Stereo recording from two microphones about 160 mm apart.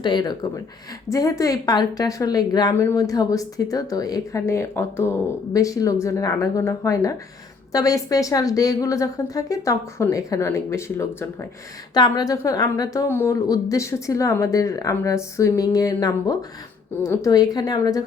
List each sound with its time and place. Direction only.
0.0 s a woman's voice: 25° left (ahead or behind)